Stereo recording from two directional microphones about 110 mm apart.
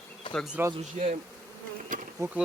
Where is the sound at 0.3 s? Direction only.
50° left (ahead or behind).